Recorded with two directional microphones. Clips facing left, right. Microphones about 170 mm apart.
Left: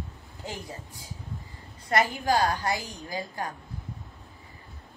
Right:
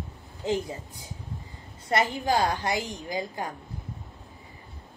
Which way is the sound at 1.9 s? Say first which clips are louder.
Even; 20° right (ahead or behind).